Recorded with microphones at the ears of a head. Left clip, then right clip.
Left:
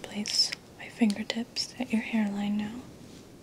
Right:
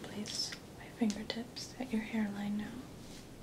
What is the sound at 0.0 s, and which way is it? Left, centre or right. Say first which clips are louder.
Speech: left 12 dB; left.